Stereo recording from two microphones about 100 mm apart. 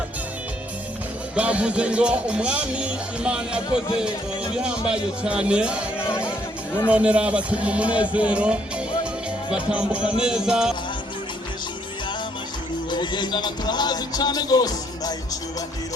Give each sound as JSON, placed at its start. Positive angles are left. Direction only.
{"t": 1.4, "sound": "speech", "side_deg": -10}
{"t": 6.0, "sound": "speech", "side_deg": 25}
{"t": 6.9, "sound": "speech", "side_deg": -15}
{"t": 12.9, "sound": "music", "side_deg": 50}